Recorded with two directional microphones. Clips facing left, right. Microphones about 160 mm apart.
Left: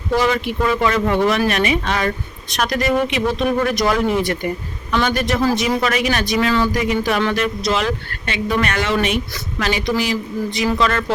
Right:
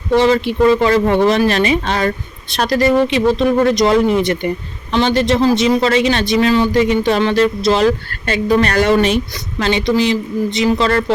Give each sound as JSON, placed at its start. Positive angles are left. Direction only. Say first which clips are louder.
{"t": 0.2, "sound": "speech", "louder": "right 7 dB", "side_deg": -30}